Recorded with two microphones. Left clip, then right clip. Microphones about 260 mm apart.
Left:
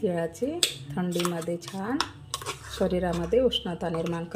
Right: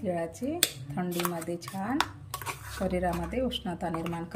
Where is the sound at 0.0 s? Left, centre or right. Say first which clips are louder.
Left 4 dB; centre.